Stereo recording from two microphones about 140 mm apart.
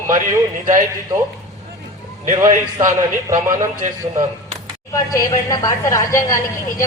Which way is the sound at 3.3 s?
65° right (ahead or behind).